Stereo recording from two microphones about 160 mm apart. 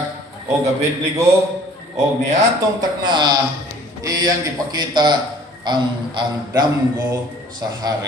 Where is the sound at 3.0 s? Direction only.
30° right (ahead or behind).